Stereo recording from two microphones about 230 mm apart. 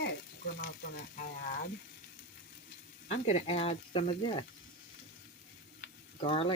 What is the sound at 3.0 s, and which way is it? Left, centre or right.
Speech, left.